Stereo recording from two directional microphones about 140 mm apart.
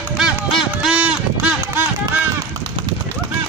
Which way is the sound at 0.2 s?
Centre (ahead or behind).